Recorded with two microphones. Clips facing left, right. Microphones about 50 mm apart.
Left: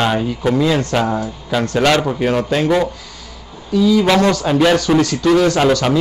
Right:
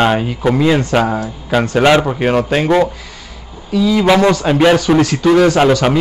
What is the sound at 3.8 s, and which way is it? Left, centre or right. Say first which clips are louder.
Speech: even; right.